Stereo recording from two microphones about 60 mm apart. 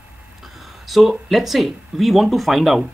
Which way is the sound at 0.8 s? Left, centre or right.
Centre.